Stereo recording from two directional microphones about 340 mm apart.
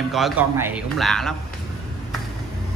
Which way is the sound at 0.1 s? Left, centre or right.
Centre.